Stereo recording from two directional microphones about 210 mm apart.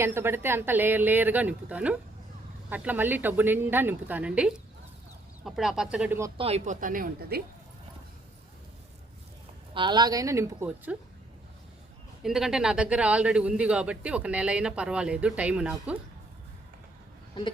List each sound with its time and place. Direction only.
0.0 s a man's voice: 10° right (ahead or behind)
6.3 s speech: 30° right (ahead or behind); by 7.4 s 45° right (ahead or behind)
9.7 s speech: 20° right (ahead or behind)
12.2 s a man's voice: centre (ahead or behind)
17.4 s speech: 20° left (ahead or behind)